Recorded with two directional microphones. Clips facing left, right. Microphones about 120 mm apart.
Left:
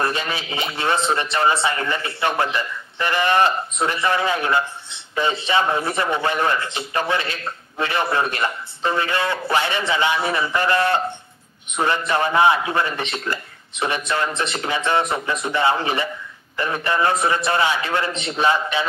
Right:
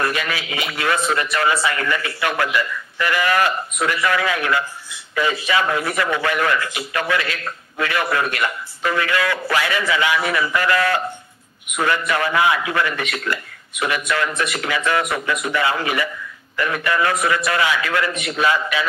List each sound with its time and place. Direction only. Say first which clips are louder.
0.0 s a man's voice: right 1 dB; 30° left (ahead or behind)